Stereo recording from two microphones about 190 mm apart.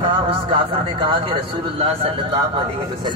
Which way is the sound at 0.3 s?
25° right (ahead or behind).